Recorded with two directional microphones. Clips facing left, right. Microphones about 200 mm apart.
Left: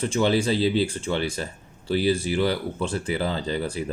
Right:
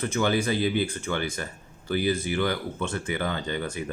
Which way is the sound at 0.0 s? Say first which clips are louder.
Left 3 dB; 30° left (ahead or behind).